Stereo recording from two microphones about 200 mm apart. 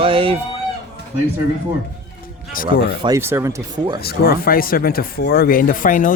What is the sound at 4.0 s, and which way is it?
Speech, 50° left (ahead or behind).